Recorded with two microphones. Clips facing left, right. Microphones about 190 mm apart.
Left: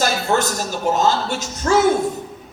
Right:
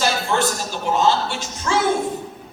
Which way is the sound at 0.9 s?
40° left (ahead or behind).